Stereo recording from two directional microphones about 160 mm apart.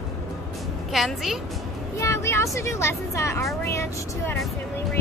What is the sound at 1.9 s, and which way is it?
Speech, 20° left (ahead or behind).